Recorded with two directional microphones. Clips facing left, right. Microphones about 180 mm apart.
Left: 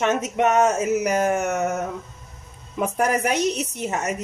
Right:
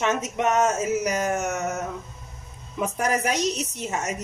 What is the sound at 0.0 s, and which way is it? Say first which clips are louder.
A woman's voice: left 3 dB; 60° left (ahead or behind).